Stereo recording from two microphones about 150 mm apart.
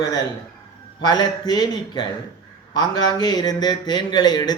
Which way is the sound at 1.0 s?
30° left (ahead or behind).